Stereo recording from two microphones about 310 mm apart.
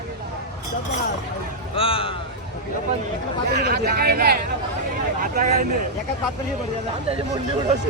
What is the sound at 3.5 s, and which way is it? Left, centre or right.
Speech, right.